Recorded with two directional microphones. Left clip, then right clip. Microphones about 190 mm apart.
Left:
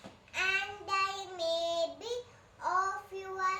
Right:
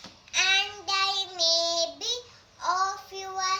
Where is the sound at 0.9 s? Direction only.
15° left (ahead or behind).